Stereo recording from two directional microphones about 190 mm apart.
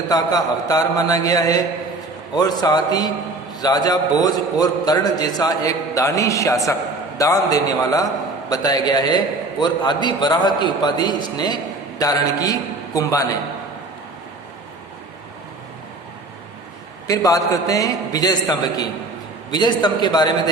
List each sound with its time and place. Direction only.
0.1 s a man's voice: 20° left (ahead or behind)
17.1 s a man's voice: 20° left (ahead or behind)